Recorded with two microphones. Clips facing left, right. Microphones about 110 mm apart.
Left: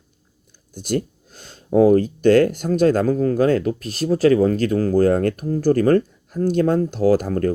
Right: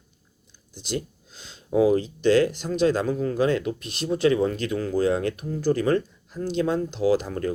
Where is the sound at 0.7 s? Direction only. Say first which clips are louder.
Left 7 dB; 50° left (ahead or behind).